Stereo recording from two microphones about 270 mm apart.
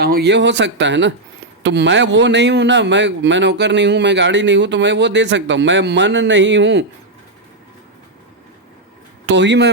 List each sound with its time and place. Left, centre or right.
0.0 s speech: right
9.2 s speech: right